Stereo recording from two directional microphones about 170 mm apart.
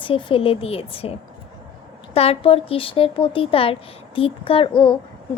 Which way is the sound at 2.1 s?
35° left (ahead or behind).